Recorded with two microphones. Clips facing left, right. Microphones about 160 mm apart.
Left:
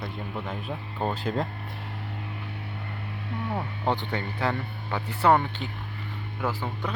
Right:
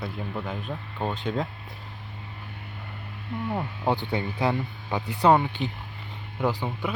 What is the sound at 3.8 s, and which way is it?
Speech, 15° right (ahead or behind).